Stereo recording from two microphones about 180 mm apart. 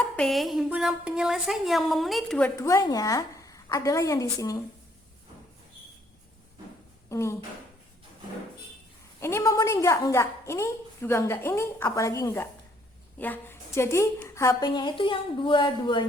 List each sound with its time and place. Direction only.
0.2 s a woman's voice: centre (ahead or behind)
2.6 s a woman's voice: 15° left (ahead or behind)
7.1 s speech: 15° left (ahead or behind)
9.2 s a woman's voice: 15° left (ahead or behind)